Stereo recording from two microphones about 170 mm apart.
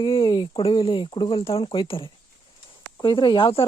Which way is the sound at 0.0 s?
30° left (ahead or behind).